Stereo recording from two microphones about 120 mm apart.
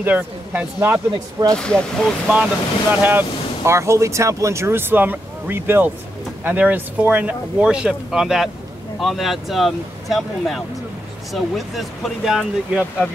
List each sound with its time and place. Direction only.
0.0 s speech: 15° right (ahead or behind)
1.1 s speech: 35° right (ahead or behind)
1.6 s speech: 5° left (ahead or behind)
2.9 s speech: 15° right (ahead or behind); by 13.1 s centre (ahead or behind)